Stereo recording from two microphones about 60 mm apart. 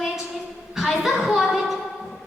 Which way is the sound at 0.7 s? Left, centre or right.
Centre.